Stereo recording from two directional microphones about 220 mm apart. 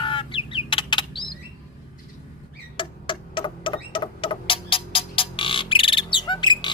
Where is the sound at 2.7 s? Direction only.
20° left (ahead or behind).